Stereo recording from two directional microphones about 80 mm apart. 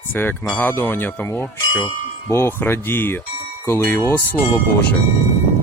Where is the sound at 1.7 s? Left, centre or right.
Left.